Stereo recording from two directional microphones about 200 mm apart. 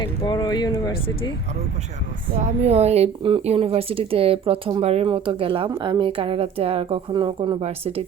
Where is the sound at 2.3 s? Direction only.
35° right (ahead or behind).